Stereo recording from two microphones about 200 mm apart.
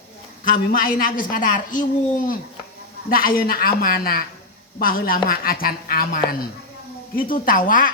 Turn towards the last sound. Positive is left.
turn(degrees=45)  # may be behind; listen again after turning